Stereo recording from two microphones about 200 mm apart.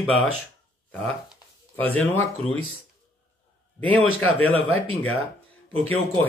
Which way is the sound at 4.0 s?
90° left.